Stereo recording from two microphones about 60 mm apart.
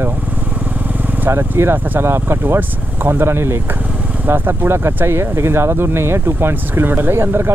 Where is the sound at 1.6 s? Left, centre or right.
Right.